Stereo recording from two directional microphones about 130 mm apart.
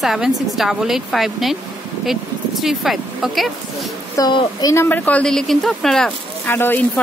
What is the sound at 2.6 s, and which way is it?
Speech, centre (ahead or behind).